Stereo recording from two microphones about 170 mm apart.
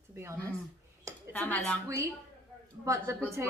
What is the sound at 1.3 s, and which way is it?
Speech, 10° left (ahead or behind).